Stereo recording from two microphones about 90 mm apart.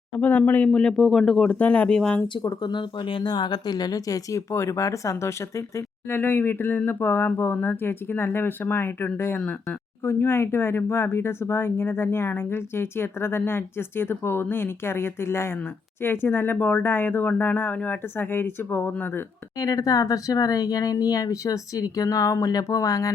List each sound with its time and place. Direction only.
0.2 s speech: 20° left (ahead or behind)
1.5 s speech: 15° left (ahead or behind)
2.4 s speech: 55° left (ahead or behind); by 19.2 s 25° left (ahead or behind)
19.5 s speech: 40° left (ahead or behind)